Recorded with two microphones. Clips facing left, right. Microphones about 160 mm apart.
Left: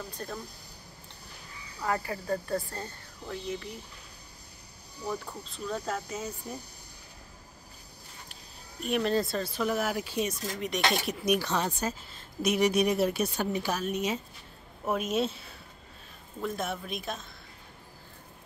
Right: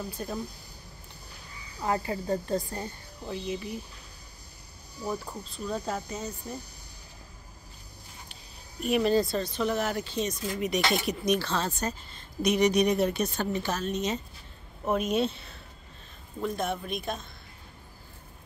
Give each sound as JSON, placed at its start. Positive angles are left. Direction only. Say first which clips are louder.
{"t": 0.2, "sound": "speech", "louder": "right 3 dB", "side_deg": -10}
{"t": 1.8, "sound": "speech", "louder": "right 2 dB", "side_deg": -20}
{"t": 5.0, "sound": "speech", "louder": "right 2 dB", "side_deg": -10}
{"t": 6.0, "sound": "a woman's voice", "louder": "even", "side_deg": 5}
{"t": 8.8, "sound": "a woman's voice", "louder": "right 3 dB", "side_deg": 0}
{"t": 10.6, "sound": "a woman's voice", "louder": "right 2 dB", "side_deg": 0}
{"t": 11.2, "sound": "speech", "louder": "left 1 dB", "side_deg": 15}
{"t": 11.8, "sound": "a woman's voice", "louder": "even", "side_deg": 5}